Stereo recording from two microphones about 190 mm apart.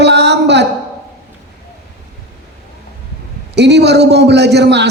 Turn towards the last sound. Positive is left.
turn(degrees=-65)  # may be behind; listen again after turning